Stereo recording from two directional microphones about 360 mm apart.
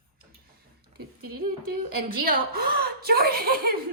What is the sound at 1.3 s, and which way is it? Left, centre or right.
A woman's voice, right.